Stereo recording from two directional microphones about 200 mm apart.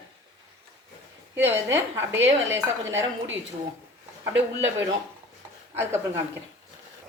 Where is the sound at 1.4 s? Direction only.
10° right (ahead or behind).